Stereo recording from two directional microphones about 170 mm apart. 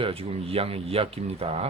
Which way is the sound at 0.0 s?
35° right (ahead or behind).